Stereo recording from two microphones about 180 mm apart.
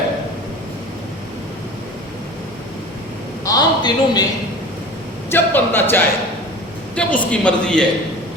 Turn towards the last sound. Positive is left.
turn(degrees=5)  # may be behind; listen again after turning